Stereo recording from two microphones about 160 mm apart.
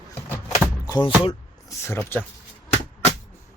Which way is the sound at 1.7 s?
15° left (ahead or behind).